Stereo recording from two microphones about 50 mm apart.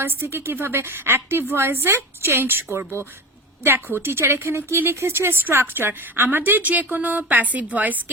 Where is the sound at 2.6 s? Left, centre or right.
Right.